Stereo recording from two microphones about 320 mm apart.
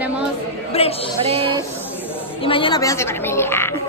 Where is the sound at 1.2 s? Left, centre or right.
Centre.